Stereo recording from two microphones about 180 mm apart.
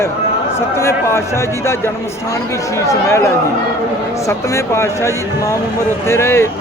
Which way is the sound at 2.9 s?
15° left (ahead or behind).